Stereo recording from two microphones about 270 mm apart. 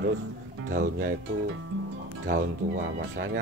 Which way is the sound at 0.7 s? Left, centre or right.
Right.